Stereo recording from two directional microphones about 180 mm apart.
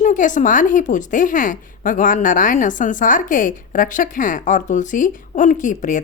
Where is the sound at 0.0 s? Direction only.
45° left (ahead or behind).